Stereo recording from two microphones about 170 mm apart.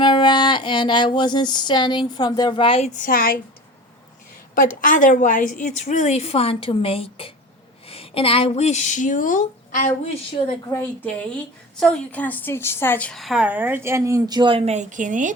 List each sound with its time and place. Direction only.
0.0 s a sound: 25° left (ahead or behind)
3.0 s a woman's voice: 60° left (ahead or behind)
4.5 s a woman's voice: 50° left (ahead or behind)
10.7 s a woman's voice: 10° left (ahead or behind); by 15.4 s 50° right (ahead or behind)